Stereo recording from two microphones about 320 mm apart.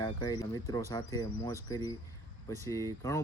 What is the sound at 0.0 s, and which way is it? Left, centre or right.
Speech, centre.